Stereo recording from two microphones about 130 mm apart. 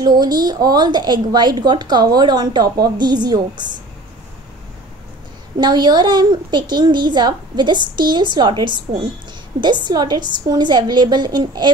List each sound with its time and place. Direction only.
0.0 s speech: 30° right (ahead or behind)
5.6 s speech: 35° right (ahead or behind)